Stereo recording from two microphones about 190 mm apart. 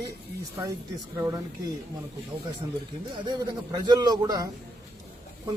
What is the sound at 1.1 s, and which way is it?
Speech, 15° right (ahead or behind).